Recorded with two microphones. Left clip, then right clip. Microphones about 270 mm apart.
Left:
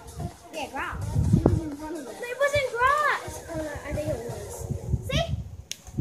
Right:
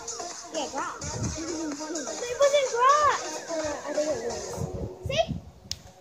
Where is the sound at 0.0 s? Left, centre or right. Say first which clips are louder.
Right 5 dB; right.